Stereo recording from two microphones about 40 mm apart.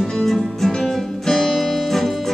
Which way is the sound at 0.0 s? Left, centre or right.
Centre.